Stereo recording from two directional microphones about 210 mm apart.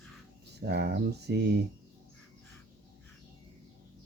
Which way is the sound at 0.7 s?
55° right (ahead or behind).